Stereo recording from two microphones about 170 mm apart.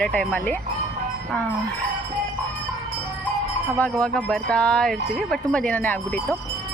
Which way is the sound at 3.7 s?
5° left (ahead or behind).